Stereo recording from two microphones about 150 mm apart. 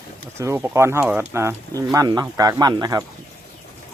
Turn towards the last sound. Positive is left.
turn(degrees=-25)  # may be behind; listen again after turning